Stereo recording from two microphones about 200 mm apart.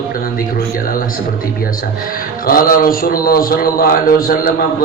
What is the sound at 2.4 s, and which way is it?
A man's voice, 45° left (ahead or behind).